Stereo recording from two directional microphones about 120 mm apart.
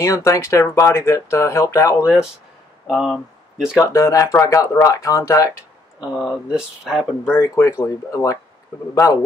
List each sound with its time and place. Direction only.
0.0 s speech: 25° left (ahead or behind)
2.9 s speech: centre (ahead or behind)
3.8 s speech: 25° left (ahead or behind)
5.9 s speech: 5° right (ahead or behind)
7.2 s speech: 25° left (ahead or behind)